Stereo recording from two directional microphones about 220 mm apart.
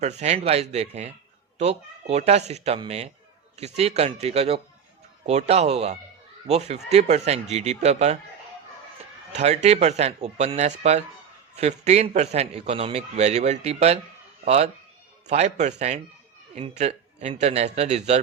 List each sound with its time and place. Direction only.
0.0 s a man's voice: 30° right (ahead or behind)
9.3 s a man's voice: 30° right (ahead or behind)